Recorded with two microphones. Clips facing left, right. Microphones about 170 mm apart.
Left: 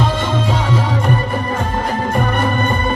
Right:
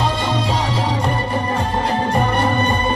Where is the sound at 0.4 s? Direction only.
35° right (ahead or behind).